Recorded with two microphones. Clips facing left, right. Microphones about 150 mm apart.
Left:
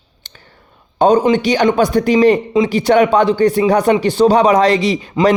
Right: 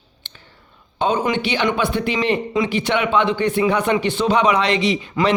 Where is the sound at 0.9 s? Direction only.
40° left (ahead or behind).